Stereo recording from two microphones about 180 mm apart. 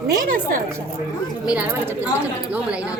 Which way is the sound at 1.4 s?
5° right (ahead or behind).